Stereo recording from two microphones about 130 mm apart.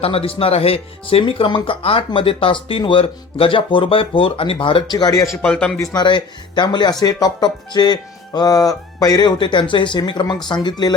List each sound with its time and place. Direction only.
0.0 s speech: 45° left (ahead or behind); by 5.3 s 30° left (ahead or behind)
5.4 s a man's voice: 10° left (ahead or behind)
5.8 s speech: 30° left (ahead or behind)